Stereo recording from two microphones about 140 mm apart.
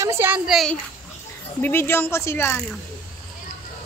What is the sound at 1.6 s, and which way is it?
A woman's voice, 15° left (ahead or behind).